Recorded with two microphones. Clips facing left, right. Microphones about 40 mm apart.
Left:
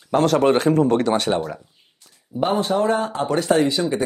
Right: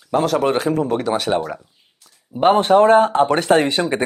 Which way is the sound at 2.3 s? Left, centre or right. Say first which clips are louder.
Right 7 dB; right.